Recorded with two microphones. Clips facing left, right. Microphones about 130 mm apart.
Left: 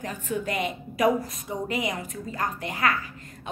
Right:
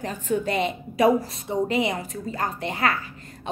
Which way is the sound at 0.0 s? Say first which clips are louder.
Right 4 dB; 30° right (ahead or behind).